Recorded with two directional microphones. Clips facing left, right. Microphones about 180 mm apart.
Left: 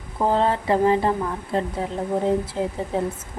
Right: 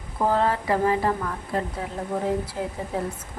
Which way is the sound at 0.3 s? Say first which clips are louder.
Left 2 dB; 25° left (ahead or behind).